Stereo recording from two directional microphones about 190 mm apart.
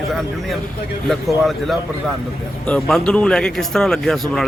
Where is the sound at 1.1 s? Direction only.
Centre (ahead or behind).